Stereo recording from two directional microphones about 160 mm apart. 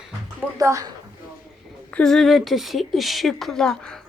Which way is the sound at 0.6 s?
20° right (ahead or behind).